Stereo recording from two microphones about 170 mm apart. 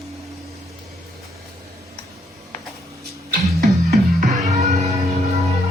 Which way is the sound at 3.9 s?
45° right (ahead or behind).